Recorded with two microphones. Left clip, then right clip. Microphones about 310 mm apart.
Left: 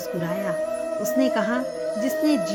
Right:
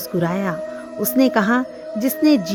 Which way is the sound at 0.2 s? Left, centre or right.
Right.